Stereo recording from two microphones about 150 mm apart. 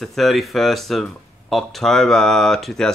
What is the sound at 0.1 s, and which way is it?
Speech, centre (ahead or behind).